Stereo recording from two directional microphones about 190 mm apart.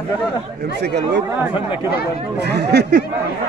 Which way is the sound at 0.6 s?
60° right (ahead or behind).